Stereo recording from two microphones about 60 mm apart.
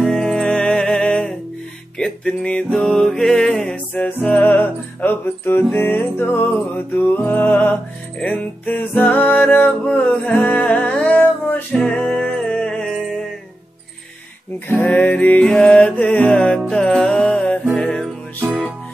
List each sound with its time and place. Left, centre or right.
0.0 s music: centre
3.7 s music: left; by 13.3 s centre
14.7 s music: left
16.3 s music: centre